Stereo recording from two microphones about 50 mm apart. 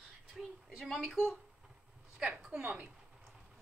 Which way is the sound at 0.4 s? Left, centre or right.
Centre.